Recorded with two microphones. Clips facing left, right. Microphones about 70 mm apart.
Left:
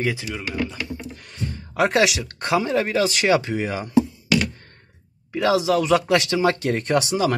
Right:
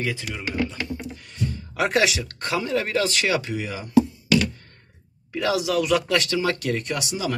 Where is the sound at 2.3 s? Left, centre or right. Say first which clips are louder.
Left 4 dB; left.